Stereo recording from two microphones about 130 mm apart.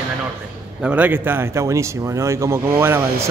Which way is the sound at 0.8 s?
10° right (ahead or behind).